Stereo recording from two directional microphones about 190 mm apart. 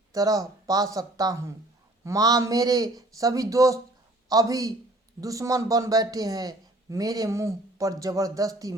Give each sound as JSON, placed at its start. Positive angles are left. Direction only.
{"t": 0.1, "sound": "a man's voice", "side_deg": -20}